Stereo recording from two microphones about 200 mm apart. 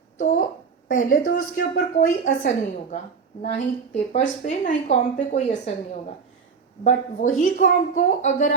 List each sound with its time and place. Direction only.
0.9 s a woman's voice: 45° left (ahead or behind)